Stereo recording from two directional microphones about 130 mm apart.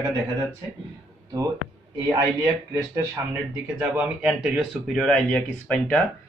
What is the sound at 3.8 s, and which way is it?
Speech, 10° right (ahead or behind).